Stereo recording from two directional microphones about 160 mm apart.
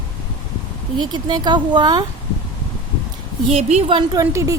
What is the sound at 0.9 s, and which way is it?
A woman's voice, 25° right (ahead or behind).